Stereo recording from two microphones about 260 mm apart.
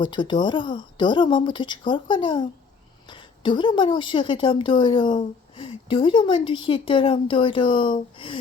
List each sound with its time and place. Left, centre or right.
0.0 s speech: centre